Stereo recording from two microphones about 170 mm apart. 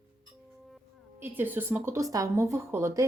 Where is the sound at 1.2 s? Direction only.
10° right (ahead or behind).